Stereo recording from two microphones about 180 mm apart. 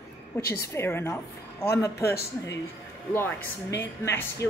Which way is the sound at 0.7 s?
15° left (ahead or behind).